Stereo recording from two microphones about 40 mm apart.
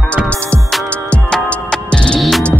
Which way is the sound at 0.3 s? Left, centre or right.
Left.